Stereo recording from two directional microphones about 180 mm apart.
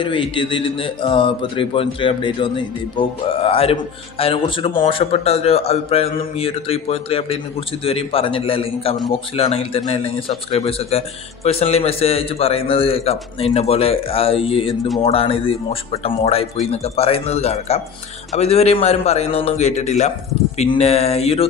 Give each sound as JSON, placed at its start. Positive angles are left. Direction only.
{"t": 0.0, "sound": "speech", "side_deg": 30}